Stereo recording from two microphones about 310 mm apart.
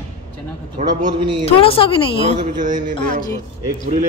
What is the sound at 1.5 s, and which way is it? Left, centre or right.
Speech, centre.